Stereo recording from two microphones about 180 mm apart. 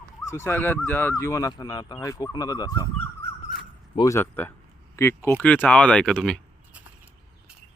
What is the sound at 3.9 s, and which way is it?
Speech, 20° left (ahead or behind).